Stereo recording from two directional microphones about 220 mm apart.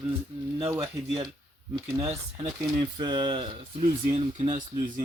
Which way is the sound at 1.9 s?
20° right (ahead or behind).